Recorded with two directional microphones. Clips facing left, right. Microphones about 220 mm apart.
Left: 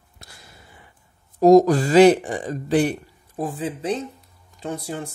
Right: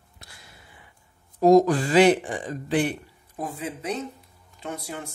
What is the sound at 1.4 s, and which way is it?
A man's voice, 40° left (ahead or behind).